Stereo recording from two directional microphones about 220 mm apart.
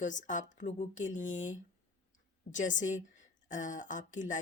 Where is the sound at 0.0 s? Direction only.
35° left (ahead or behind).